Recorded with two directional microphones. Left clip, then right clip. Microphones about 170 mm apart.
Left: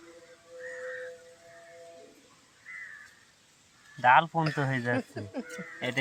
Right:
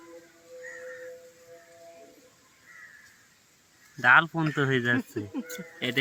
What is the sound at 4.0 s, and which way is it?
Speech, 10° right (ahead or behind).